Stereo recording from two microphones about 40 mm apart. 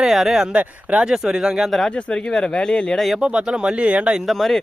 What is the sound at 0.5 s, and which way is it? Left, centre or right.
Speech, right.